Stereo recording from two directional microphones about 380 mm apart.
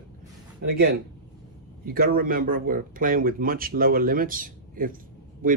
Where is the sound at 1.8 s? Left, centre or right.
Right.